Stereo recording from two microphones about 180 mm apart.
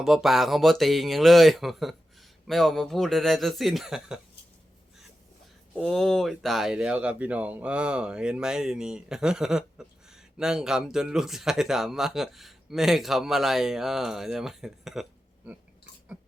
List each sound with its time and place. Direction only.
0.0 s speech: centre (ahead or behind)
5.7 s speech: centre (ahead or behind)